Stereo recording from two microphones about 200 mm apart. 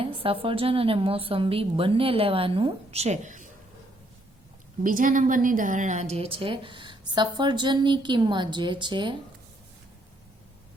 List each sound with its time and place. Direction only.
0.0 s a sound: 25° right (ahead or behind)
0.4 s a woman's voice: 25° right (ahead or behind)
4.8 s a woman's voice: 40° right (ahead or behind); by 9.1 s 25° right (ahead or behind)